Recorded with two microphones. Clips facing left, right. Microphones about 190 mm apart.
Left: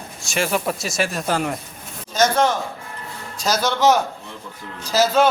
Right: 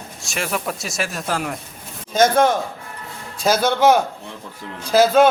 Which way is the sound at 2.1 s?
50° right (ahead or behind).